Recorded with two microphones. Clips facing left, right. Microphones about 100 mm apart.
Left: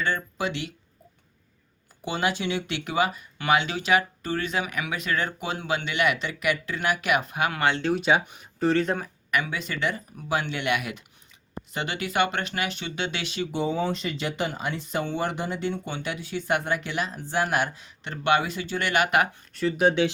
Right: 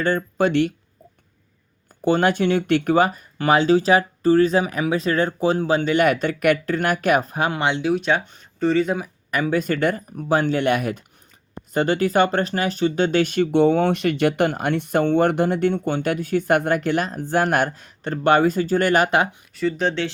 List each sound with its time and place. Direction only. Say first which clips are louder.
0.0 s speech: right 8 dB; 40° right (ahead or behind)
2.0 s speech: right 9 dB; 50° right (ahead or behind); by 7.6 s 30° right (ahead or behind)
7.6 s speech: right 2 dB; 15° right (ahead or behind)
7.9 s speech: right 2 dB; centre (ahead or behind)
9.3 s speech: right 7 dB; 40° right (ahead or behind)
19.5 s speech: even; 5° left (ahead or behind)